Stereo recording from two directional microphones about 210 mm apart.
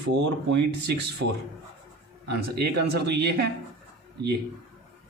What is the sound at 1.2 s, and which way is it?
Speech, 60° right (ahead or behind).